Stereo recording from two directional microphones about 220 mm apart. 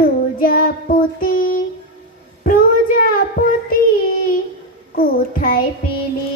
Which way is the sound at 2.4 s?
40° left (ahead or behind).